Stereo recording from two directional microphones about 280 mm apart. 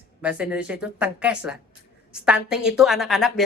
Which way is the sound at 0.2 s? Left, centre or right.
Centre.